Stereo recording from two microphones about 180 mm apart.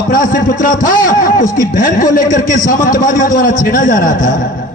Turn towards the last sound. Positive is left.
turn(degrees=45)  # may be behind; listen again after turning